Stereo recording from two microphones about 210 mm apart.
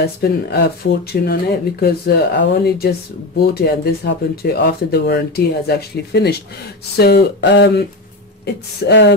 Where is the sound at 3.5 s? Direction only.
50° left (ahead or behind).